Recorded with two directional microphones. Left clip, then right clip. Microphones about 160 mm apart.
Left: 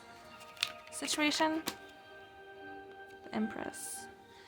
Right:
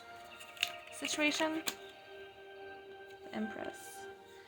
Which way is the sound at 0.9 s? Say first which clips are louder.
Left 2 dB; 35° left (ahead or behind).